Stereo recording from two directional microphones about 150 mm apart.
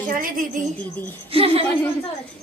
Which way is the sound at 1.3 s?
40° right (ahead or behind).